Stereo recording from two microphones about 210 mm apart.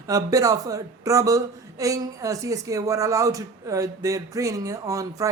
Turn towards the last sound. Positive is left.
turn(degrees=-15)  # may be behind; listen again after turning